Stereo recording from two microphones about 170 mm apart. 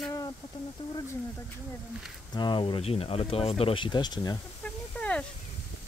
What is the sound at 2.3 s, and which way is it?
Speech, 25° left (ahead or behind).